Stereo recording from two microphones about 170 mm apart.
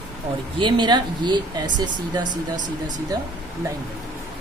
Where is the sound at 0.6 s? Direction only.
25° right (ahead or behind).